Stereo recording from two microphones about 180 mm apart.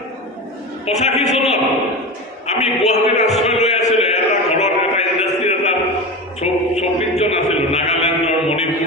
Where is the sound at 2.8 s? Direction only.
40° left (ahead or behind).